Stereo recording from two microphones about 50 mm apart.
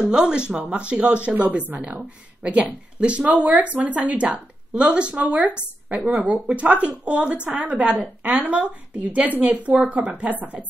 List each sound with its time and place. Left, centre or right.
0.0 s speech: right